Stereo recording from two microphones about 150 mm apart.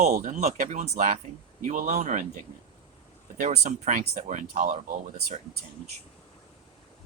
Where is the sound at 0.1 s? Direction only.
60° right (ahead or behind).